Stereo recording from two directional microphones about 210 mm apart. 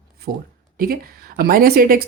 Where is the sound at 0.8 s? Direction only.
45° right (ahead or behind).